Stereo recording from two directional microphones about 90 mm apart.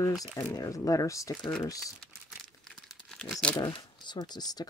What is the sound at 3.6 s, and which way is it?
Speech, 65° left (ahead or behind).